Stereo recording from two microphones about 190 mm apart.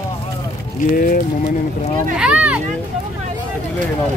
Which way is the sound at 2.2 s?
5° right (ahead or behind).